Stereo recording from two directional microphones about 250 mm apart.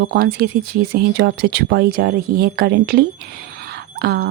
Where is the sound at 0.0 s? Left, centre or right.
Right.